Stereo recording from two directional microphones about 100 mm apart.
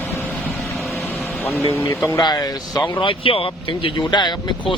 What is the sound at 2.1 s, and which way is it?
Speech, 45° left (ahead or behind).